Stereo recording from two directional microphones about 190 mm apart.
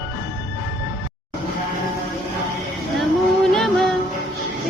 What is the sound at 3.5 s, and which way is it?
Music, centre (ahead or behind).